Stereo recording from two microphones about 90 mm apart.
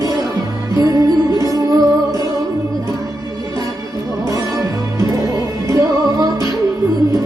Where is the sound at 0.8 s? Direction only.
40° right (ahead or behind).